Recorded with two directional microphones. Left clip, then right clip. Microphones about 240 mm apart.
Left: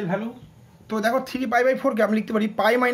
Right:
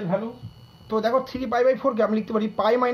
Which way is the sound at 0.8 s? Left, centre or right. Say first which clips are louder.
Right 1 dB; centre.